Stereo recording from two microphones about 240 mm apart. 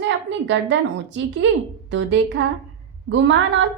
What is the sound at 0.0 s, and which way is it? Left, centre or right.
A woman's voice, right.